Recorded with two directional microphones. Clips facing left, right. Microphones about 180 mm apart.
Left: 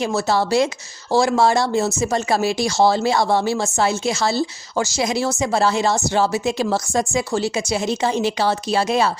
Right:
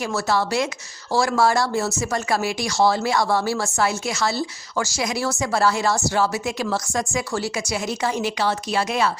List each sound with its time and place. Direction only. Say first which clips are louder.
0.0 s speech: left 3 dB; 20° left (ahead or behind)